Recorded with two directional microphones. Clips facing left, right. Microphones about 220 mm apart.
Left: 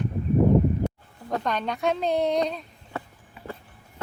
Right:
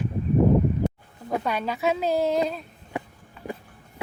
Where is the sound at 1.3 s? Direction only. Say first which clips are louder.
Right 1 dB; 10° right (ahead or behind).